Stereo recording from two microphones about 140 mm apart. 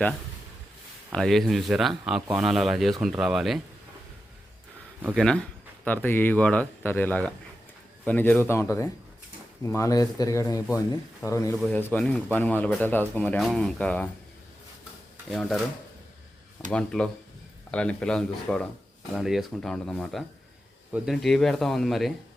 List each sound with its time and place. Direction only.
1.1 s speech: centre (ahead or behind)
5.1 s speech: 5° left (ahead or behind)
15.3 s speech: centre (ahead or behind)
16.7 s speech: 5° left (ahead or behind)